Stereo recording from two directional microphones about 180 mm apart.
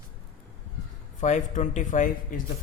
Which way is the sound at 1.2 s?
45° left (ahead or behind).